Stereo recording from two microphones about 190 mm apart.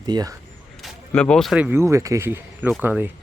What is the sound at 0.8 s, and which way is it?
Speech, 5° left (ahead or behind).